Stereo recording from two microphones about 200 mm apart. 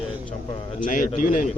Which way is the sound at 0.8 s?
40° left (ahead or behind).